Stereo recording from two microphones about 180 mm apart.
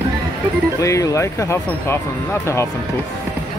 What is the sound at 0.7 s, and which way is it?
Speech, 15° left (ahead or behind).